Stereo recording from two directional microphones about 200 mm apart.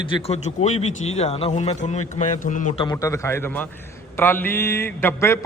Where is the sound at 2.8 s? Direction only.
15° left (ahead or behind).